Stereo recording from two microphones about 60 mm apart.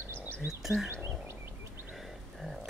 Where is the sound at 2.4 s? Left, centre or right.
Centre.